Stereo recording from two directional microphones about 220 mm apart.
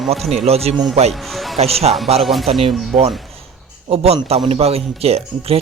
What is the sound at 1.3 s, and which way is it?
Speech, centre (ahead or behind).